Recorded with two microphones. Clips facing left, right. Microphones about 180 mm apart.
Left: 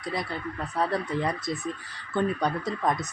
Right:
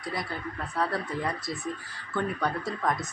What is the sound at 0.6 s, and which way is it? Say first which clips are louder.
A man's voice: left 2 dB; 20° left (ahead or behind).